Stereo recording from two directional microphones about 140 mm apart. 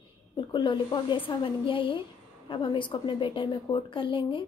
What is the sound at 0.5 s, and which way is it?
A woman's voice, 35° left (ahead or behind).